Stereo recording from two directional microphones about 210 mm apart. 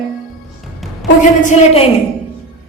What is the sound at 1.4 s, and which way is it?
Speech, 35° left (ahead or behind).